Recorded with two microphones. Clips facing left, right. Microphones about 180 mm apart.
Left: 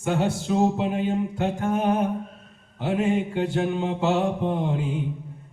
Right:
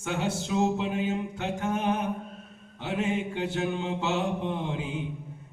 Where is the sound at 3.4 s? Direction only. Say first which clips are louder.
Left 5 dB; 45° left (ahead or behind).